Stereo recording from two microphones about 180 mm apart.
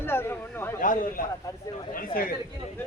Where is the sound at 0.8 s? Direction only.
50° left (ahead or behind).